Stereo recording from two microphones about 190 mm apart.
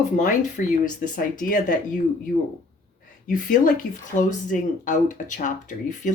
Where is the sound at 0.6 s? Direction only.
45° left (ahead or behind).